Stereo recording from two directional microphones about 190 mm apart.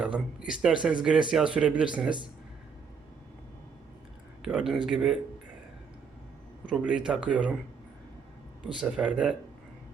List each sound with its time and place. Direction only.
0.0 s speech: 5° right (ahead or behind)
4.4 s speech: 5° right (ahead or behind)
6.7 s speech: 5° right (ahead or behind)
8.7 s speech: 5° right (ahead or behind)